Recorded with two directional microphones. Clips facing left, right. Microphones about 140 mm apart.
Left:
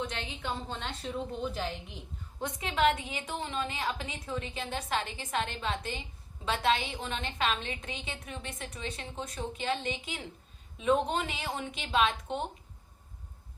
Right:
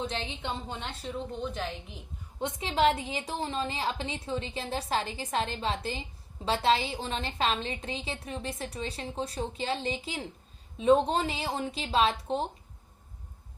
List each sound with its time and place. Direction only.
0.0 s a woman's voice: 30° right (ahead or behind)
0.7 s a woman's voice: 10° right (ahead or behind)
2.4 s a woman's voice: 30° right (ahead or behind)